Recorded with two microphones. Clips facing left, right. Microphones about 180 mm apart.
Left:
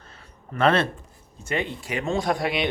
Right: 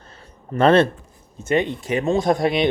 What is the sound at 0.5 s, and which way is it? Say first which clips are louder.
Speech: right 6 dB; 30° right (ahead or behind).